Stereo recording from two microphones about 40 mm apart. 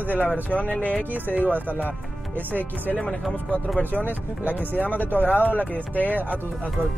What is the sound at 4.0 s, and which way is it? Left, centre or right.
Speech, right.